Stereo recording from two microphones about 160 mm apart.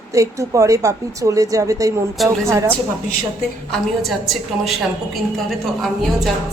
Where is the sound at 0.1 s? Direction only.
20° right (ahead or behind).